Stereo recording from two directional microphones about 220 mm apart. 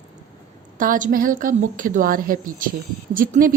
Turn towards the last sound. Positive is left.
turn(degrees=-40)  # may be behind; listen again after turning